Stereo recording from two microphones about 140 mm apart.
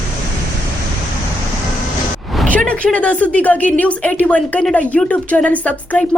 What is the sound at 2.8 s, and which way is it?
Speech, 5° left (ahead or behind).